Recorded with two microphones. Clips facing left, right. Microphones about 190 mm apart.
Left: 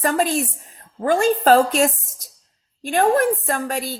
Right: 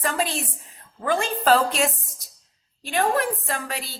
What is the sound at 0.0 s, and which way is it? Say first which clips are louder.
A woman's voice: left 6 dB; 45° left (ahead or behind).